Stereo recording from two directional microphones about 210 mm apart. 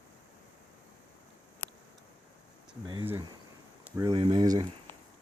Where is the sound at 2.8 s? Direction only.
20° right (ahead or behind).